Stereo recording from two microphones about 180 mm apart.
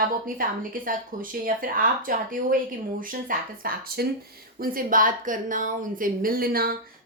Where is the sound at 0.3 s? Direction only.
50° right (ahead or behind).